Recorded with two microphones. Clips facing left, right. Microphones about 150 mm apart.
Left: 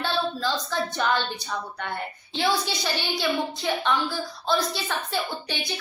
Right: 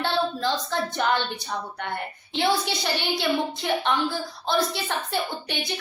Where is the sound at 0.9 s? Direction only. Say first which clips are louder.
Right 1 dB; 20° right (ahead or behind).